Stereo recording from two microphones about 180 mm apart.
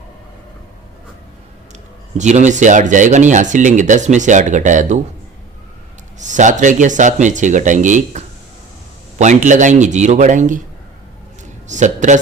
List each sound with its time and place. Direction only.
2.1 s speech: 40° right (ahead or behind)
6.1 s speech: 45° right (ahead or behind)
11.7 s speech: 40° right (ahead or behind)